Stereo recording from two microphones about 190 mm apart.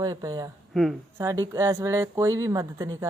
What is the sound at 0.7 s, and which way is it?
Speech, centre (ahead or behind).